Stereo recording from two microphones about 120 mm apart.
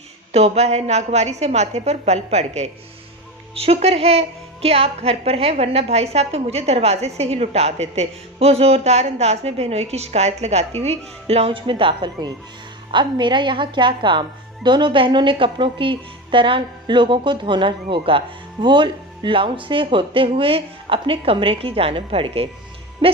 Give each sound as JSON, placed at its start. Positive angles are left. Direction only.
{"t": 0.3, "sound": "a woman's voice", "side_deg": -60}
{"t": 3.5, "sound": "a woman's voice", "side_deg": -55}